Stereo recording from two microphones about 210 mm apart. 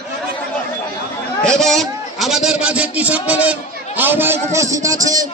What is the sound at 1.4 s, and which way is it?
A man's voice, centre (ahead or behind).